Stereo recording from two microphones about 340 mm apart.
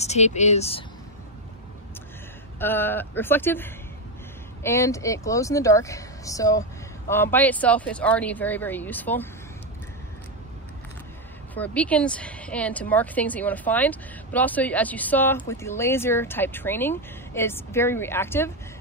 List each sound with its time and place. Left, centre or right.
0.0 s speech: centre
2.6 s a woman's voice: centre
11.5 s a woman's voice: centre